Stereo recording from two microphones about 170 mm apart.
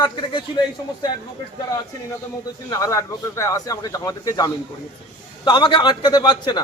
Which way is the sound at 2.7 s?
20° left (ahead or behind).